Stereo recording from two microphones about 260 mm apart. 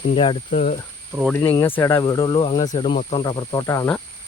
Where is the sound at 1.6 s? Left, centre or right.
Centre.